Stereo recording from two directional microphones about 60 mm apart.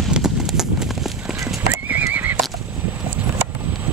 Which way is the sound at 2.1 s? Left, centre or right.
Right.